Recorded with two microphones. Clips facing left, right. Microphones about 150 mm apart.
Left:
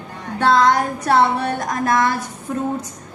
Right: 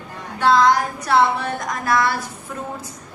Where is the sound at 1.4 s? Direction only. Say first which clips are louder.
Left 3 dB; 35° left (ahead or behind).